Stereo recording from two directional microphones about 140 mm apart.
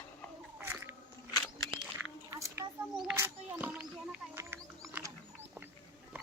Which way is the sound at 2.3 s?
20° right (ahead or behind).